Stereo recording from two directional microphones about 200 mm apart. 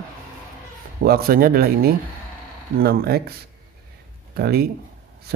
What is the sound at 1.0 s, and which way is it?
Speech, 50° right (ahead or behind).